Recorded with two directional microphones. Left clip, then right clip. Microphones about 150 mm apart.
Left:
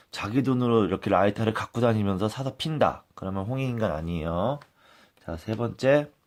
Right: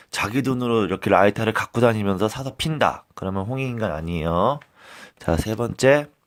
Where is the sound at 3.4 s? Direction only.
20° right (ahead or behind).